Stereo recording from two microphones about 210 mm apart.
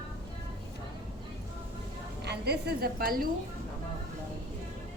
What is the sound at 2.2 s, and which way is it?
A woman's voice, 50° right (ahead or behind).